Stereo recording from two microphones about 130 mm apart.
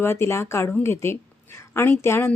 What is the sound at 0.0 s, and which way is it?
A woman's voice, 20° left (ahead or behind).